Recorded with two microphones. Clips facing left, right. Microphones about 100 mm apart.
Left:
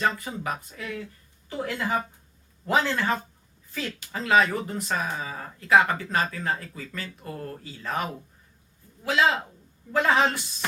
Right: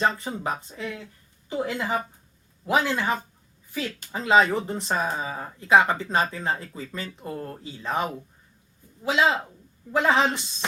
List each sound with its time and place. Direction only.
0.0 s speech: 25° right (ahead or behind)
9.9 s speech: 20° right (ahead or behind)